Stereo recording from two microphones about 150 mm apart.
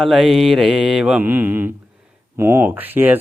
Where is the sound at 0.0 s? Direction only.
Centre (ahead or behind).